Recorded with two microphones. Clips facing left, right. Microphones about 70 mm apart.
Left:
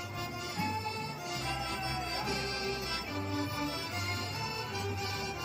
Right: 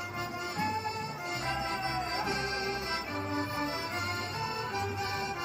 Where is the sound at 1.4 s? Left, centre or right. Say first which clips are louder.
Right 4 dB; right.